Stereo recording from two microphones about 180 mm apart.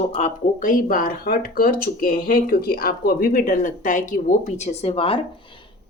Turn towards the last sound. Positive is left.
turn(degrees=30)  # may be behind; listen again after turning